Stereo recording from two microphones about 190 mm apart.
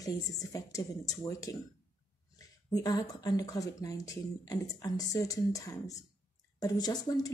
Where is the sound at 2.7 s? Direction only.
20° left (ahead or behind).